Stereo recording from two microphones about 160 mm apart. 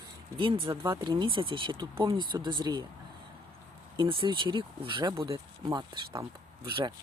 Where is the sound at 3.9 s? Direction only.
30° right (ahead or behind).